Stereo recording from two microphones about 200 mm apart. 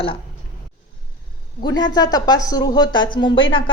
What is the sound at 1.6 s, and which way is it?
A woman's voice, 20° left (ahead or behind).